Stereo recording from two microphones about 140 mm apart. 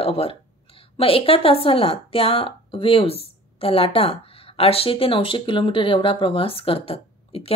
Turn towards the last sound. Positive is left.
turn(degrees=45)  # may be behind; listen again after turning